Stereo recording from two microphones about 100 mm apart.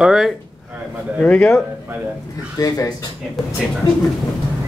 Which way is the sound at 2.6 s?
40° left (ahead or behind).